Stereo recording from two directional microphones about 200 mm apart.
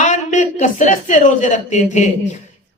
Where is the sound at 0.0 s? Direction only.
40° left (ahead or behind).